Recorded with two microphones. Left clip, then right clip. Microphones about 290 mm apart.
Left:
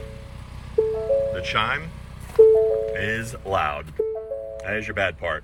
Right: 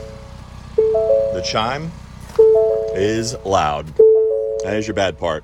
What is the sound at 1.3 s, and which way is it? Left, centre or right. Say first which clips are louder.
Speech: right 4 dB; centre.